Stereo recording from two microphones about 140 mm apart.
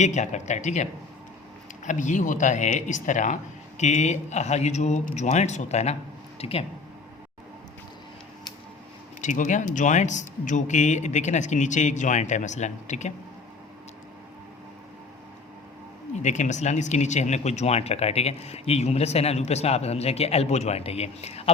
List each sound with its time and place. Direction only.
0.0 s speech: 55° left (ahead or behind)
9.2 s speech: 60° left (ahead or behind)
16.2 s speech: 60° left (ahead or behind)